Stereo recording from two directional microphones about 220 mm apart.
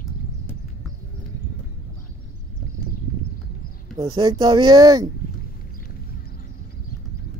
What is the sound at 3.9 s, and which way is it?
Speech, 20° right (ahead or behind).